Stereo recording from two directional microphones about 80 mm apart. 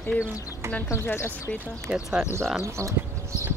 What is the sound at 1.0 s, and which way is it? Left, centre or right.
Speech, left.